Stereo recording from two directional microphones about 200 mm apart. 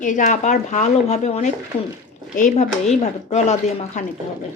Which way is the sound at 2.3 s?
35° left (ahead or behind).